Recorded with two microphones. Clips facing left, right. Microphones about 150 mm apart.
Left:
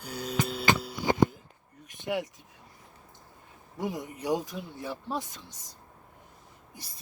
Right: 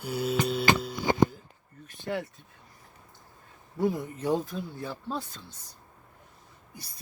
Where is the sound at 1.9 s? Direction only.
15° left (ahead or behind).